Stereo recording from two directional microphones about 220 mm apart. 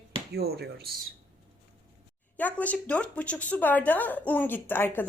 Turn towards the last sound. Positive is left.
turn(degrees=10)  # may be behind; listen again after turning